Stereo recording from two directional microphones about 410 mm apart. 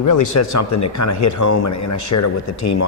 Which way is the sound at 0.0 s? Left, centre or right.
Left.